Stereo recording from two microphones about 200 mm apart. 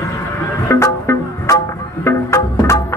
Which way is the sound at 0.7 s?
15° left (ahead or behind).